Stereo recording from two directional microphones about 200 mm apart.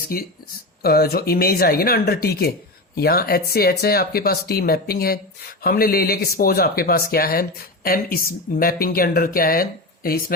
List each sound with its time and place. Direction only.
0.1 s speech: 45° left (ahead or behind)